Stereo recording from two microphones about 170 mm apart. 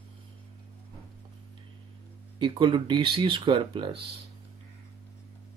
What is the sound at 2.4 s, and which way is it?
Speech, 30° right (ahead or behind).